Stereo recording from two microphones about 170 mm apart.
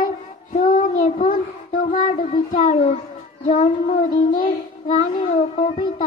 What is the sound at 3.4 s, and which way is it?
Child singing, 55° left (ahead or behind).